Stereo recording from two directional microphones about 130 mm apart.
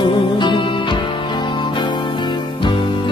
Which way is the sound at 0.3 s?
35° left (ahead or behind).